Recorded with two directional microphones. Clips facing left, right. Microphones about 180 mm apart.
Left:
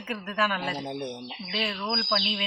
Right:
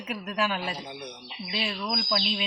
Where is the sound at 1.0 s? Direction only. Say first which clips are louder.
Left 7 dB; 30° left (ahead or behind).